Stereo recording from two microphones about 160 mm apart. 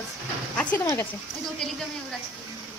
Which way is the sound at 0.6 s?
10° left (ahead or behind).